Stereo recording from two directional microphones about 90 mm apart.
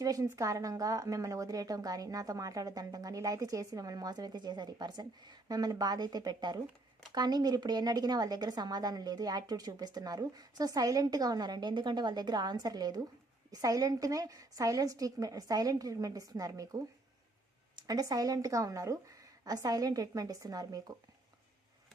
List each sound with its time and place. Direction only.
0.0 s speech: 40° right (ahead or behind)